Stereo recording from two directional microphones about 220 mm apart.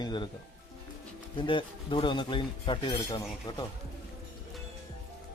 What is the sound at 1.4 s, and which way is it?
Speech, 20° left (ahead or behind).